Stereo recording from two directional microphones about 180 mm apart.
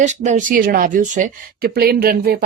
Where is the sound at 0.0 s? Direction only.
40° right (ahead or behind).